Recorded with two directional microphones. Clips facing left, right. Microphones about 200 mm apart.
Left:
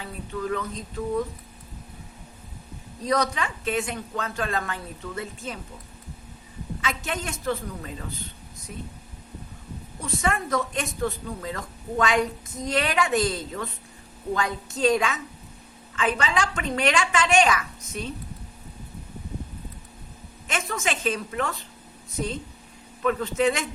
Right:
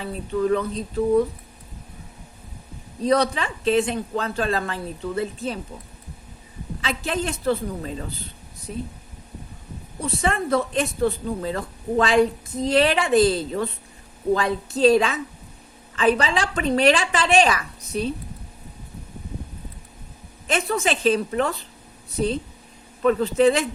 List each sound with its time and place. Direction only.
0.0 s a woman's voice: 30° right (ahead or behind)
3.0 s a woman's voice: 30° right (ahead or behind)
6.8 s a woman's voice: 30° right (ahead or behind)
10.0 s a woman's voice: 30° right (ahead or behind)
20.5 s a woman's voice: 35° right (ahead or behind)